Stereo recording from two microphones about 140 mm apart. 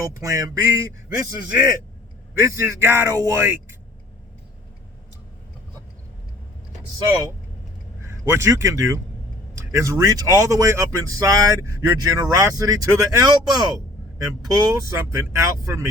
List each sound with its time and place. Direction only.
0.2 s speech: 20° right (ahead or behind)
2.4 s a man's voice: 15° right (ahead or behind)
8.0 s speech: 20° right (ahead or behind)